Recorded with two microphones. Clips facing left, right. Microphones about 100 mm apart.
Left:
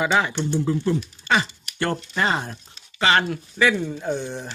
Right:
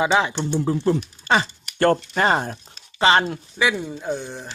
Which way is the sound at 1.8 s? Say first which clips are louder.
Right 6 dB; 45° right (ahead or behind).